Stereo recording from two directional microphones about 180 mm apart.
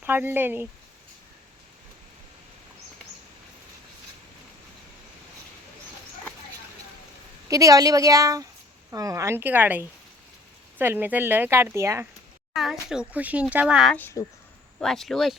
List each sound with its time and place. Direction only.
0.0 s speech: 10° right (ahead or behind)
7.4 s a woman's voice: 20° right (ahead or behind)
13.9 s speech: 15° left (ahead or behind)
14.8 s speech: centre (ahead or behind)